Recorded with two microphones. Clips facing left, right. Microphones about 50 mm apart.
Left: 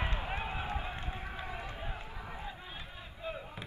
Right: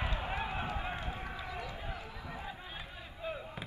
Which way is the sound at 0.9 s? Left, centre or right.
Right.